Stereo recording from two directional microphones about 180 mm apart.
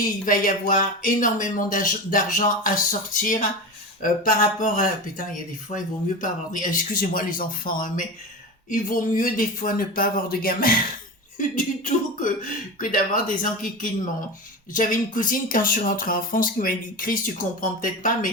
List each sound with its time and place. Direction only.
0.3 s speech: 45° left (ahead or behind)
14.7 s speech: 45° left (ahead or behind)